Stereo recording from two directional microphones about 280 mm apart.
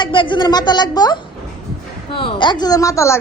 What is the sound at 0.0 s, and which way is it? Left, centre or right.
A woman's voice, centre.